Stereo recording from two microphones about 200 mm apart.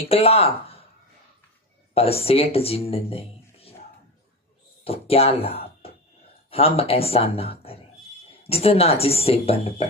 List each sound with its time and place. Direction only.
0.1 s a man's voice: 30° left (ahead or behind)
2.0 s speech: 30° left (ahead or behind)
4.8 s a man's voice: 30° left (ahead or behind)